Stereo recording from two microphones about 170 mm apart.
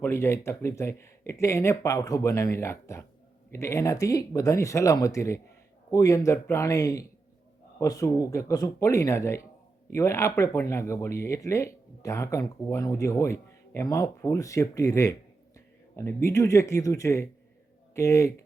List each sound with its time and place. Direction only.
0.0 s speech: 15° left (ahead or behind)